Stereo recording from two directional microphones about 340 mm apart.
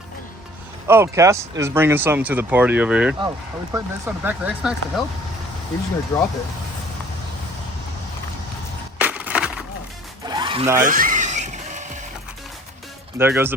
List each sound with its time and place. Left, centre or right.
0.9 s speech: centre
6.1 s speech: centre
9.0 s crushing: centre
10.2 s music: centre
13.1 s speech: centre